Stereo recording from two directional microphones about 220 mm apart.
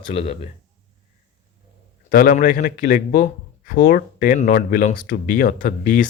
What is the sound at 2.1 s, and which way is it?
Speech, 40° left (ahead or behind).